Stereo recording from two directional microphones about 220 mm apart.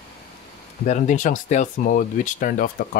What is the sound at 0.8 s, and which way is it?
Speech, 35° left (ahead or behind).